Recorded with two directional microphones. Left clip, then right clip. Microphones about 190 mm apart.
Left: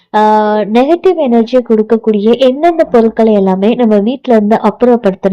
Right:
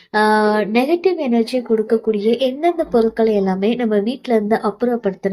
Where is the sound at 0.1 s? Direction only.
30° left (ahead or behind).